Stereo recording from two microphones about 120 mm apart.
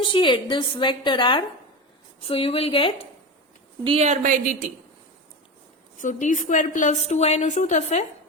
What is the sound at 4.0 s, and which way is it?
Speech, 85° right.